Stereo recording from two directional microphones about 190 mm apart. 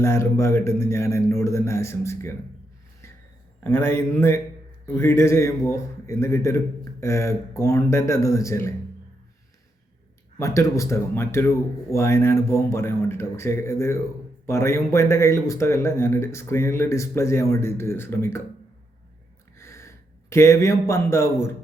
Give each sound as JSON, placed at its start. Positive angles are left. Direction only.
{"t": 0.0, "sound": "speech", "side_deg": 15}
{"t": 3.6, "sound": "speech", "side_deg": 10}
{"t": 10.3, "sound": "speech", "side_deg": 15}
{"t": 19.5, "sound": "a sound", "side_deg": 15}